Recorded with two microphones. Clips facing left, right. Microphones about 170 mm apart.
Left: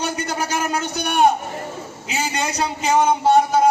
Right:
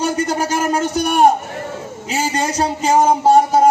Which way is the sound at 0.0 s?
45° right (ahead or behind).